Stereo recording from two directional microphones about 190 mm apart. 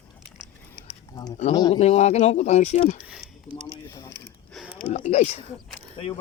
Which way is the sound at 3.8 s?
15° left (ahead or behind).